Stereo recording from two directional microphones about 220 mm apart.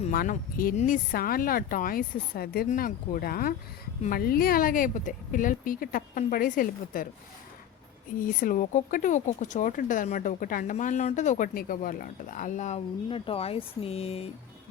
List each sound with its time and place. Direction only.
0.0 s speech: 35° left (ahead or behind)
8.2 s speech: 40° left (ahead or behind)